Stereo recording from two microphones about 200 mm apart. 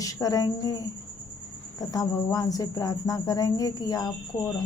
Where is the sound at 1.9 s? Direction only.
20° left (ahead or behind).